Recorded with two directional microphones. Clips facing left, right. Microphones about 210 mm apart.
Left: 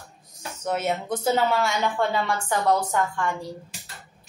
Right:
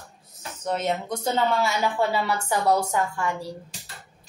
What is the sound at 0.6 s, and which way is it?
A woman's voice, 5° left (ahead or behind).